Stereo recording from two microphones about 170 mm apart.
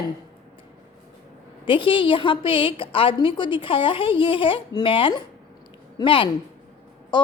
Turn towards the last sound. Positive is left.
turn(degrees=25)  # may be behind; listen again after turning